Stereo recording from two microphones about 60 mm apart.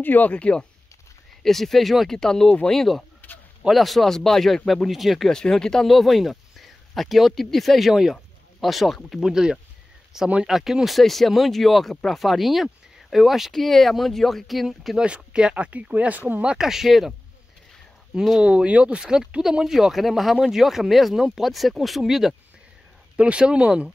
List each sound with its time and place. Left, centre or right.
0.0 s speech: left
1.4 s speech: centre
5.3 s speech: centre
9.3 s speech: centre
15.0 s speech: centre
16.4 s speech: centre
18.4 s speech: centre
23.1 s speech: centre